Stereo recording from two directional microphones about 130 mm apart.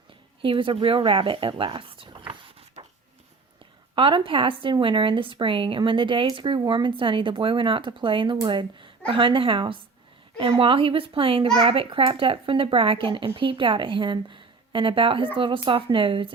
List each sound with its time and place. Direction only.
0.4 s a child's voice: 40° right (ahead or behind)